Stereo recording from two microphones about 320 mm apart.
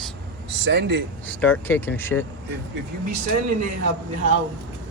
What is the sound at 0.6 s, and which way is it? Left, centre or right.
Speech, right.